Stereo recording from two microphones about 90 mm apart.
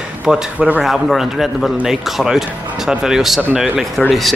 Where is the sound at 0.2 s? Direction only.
15° right (ahead or behind).